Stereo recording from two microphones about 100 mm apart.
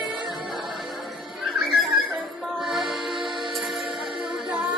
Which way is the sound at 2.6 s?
5° right (ahead or behind).